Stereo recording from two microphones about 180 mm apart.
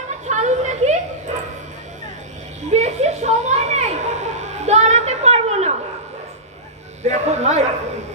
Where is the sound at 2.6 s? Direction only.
40° right (ahead or behind).